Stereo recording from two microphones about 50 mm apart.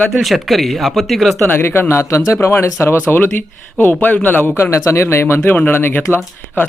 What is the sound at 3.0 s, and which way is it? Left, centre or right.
A man's voice, left.